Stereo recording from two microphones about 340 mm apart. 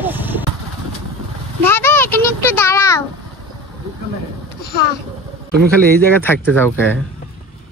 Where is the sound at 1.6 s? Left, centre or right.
Centre.